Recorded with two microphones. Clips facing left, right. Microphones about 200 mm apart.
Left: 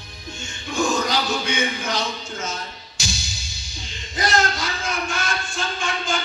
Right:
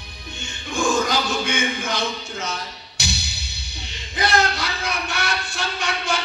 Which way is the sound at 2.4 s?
65° right (ahead or behind).